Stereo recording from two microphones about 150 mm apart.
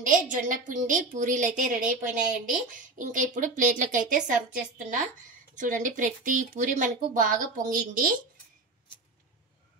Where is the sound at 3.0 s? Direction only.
60° right (ahead or behind).